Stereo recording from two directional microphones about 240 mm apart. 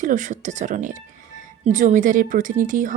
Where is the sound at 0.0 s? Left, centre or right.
Right.